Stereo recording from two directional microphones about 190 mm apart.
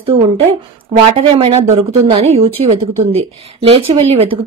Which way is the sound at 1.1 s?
30° right (ahead or behind).